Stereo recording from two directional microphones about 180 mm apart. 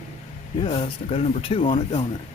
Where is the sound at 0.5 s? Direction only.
30° left (ahead or behind).